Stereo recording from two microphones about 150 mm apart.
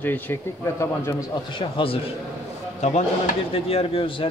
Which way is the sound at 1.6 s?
35° left (ahead or behind).